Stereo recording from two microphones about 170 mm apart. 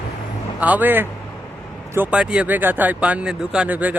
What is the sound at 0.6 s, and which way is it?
Speech, 10° right (ahead or behind).